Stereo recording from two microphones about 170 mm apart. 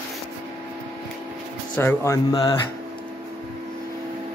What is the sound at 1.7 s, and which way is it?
Speech, 15° left (ahead or behind).